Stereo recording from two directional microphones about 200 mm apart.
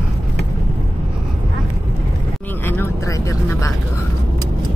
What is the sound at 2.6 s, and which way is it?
Speech, 10° left (ahead or behind).